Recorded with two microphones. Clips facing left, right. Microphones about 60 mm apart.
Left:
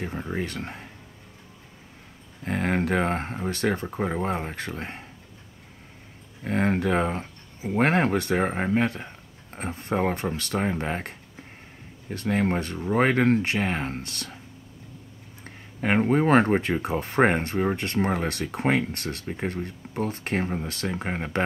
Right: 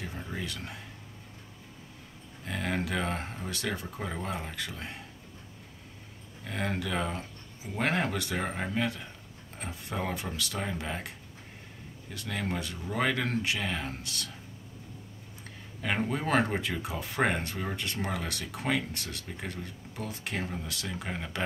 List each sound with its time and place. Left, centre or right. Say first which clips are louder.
0.0 s speech: left 8 dB; left
2.4 s speech: left 7 dB; left
6.4 s speech: left 9 dB; left
15.4 s speech: left 7 dB; left